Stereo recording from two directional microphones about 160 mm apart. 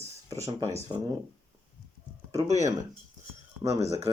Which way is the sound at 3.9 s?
20° right (ahead or behind).